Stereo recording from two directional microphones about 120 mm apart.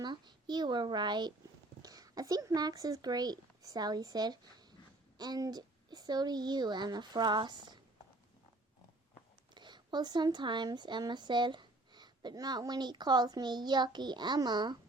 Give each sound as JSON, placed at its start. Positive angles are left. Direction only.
{"t": 0.0, "sound": "speech", "side_deg": -40}
{"t": 9.6, "sound": "speech", "side_deg": -40}